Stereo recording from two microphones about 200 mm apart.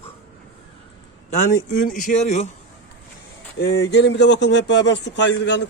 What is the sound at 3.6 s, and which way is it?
Speech, 70° left (ahead or behind).